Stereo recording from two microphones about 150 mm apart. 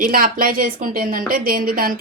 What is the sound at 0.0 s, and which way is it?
Speech, 70° right (ahead or behind).